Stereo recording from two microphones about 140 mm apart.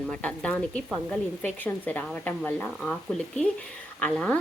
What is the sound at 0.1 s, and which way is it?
Speech, 10° left (ahead or behind).